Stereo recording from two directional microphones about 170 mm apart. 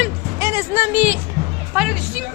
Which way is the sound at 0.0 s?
15° right (ahead or behind).